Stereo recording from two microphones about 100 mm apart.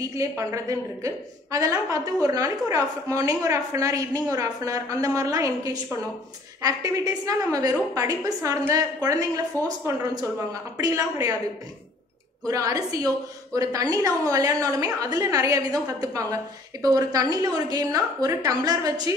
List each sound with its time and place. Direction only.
0.0 s a woman's voice: 30° right (ahead or behind)
10.8 s a woman's voice: 35° right (ahead or behind)
12.4 s a woman's voice: 35° right (ahead or behind)